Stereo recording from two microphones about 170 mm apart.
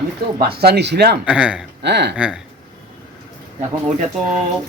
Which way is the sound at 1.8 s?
80° right.